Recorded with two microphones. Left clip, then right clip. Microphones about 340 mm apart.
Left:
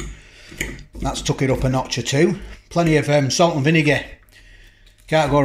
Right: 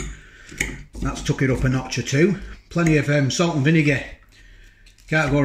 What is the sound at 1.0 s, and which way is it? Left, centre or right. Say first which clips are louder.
Speech: left 2 dB; centre.